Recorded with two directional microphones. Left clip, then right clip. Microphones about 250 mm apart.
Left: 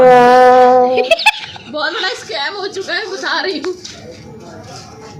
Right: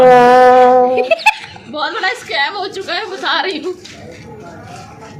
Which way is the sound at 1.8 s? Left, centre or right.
Right.